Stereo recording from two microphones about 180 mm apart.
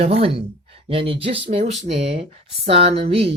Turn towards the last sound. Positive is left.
turn(degrees=-30)  # may be behind; listen again after turning